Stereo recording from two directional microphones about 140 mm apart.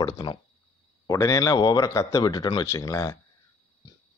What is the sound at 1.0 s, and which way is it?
Speech, 20° left (ahead or behind).